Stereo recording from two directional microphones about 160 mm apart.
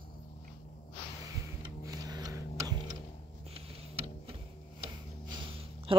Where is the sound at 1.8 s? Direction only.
20° right (ahead or behind).